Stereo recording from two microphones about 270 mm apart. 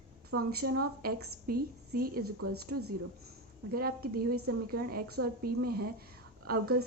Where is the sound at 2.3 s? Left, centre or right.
Right.